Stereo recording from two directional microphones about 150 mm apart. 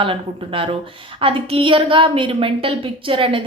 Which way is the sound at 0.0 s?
35° right (ahead or behind).